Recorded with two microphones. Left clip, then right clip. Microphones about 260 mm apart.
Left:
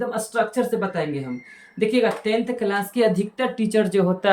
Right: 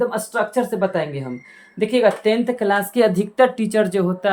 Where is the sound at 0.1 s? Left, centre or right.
Centre.